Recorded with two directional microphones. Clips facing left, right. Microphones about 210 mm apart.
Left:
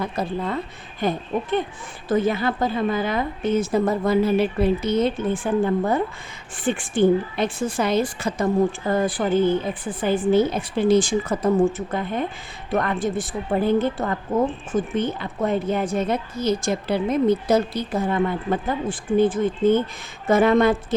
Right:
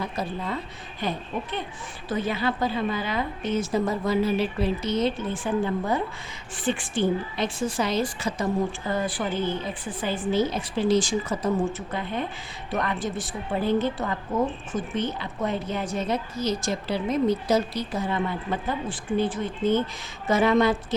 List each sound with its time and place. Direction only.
0.0 s a woman's voice: 55° left (ahead or behind)